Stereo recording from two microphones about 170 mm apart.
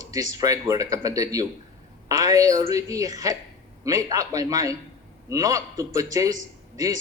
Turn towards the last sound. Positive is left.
turn(degrees=-20)  # may be behind; listen again after turning